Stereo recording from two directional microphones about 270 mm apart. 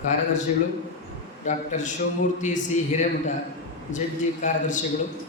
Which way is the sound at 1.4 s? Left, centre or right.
Left.